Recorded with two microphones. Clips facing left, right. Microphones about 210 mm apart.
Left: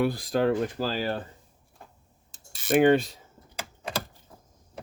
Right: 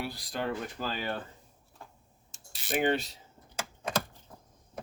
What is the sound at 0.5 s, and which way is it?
Speech, 40° left (ahead or behind).